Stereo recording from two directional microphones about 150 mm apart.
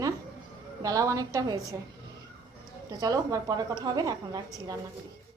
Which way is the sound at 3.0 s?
25° right (ahead or behind).